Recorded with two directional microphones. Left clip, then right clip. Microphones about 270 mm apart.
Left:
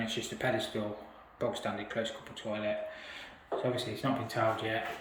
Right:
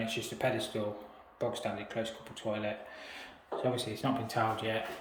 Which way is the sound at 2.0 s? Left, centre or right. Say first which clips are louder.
Left 2 dB; centre.